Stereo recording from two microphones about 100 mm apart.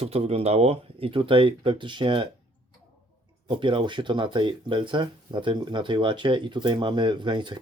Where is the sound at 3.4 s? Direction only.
55° right (ahead or behind).